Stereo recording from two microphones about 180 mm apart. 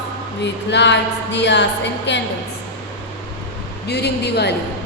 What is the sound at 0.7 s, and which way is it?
A woman's voice, 80° left.